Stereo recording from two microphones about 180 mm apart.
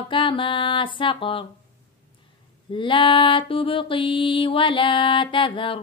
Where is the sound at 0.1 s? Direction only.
30° left (ahead or behind).